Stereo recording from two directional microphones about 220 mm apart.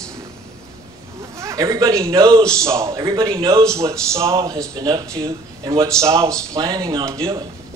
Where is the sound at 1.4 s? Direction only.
15° right (ahead or behind).